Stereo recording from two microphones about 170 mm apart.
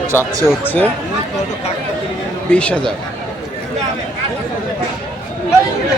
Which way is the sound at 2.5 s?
5° left (ahead or behind).